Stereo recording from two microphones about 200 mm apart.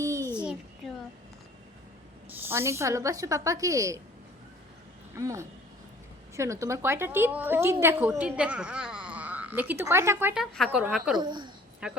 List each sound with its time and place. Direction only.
0.2 s a sound: 10° left (ahead or behind)
2.4 s a woman's voice: 10° right (ahead or behind)
5.1 s a woman's voice: 15° right (ahead or behind)
11.2 s a woman's voice: 20° right (ahead or behind)
11.8 s a woman's voice: 5° right (ahead or behind)